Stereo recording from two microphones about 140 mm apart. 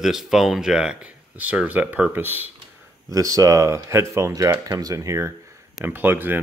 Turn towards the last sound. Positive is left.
turn(degrees=-15)  # may be behind; listen again after turning